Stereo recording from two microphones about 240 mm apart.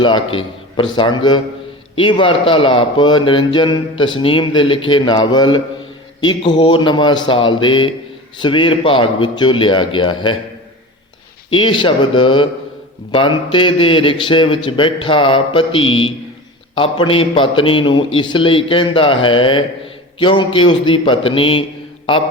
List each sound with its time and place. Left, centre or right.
0.0 s speech: left
11.5 s speech: left